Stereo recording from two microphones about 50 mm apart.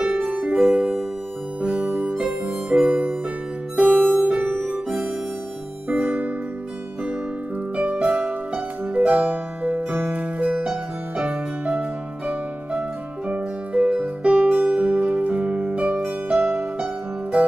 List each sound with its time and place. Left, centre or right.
0.0 s music: right
1.6 s harmonica: right
3.7 s music: right
7.7 s music: right
13.3 s music: right